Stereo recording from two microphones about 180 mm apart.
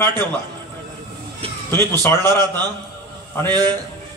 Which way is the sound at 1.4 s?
30° right (ahead or behind).